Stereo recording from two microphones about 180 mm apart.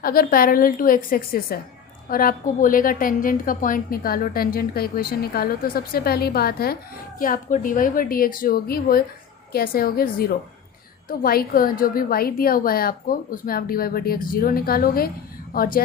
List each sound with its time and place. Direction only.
0.0 s a woman's voice: 55° left (ahead or behind)